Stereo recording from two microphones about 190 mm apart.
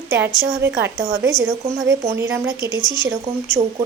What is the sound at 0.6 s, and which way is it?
Speech, 10° right (ahead or behind).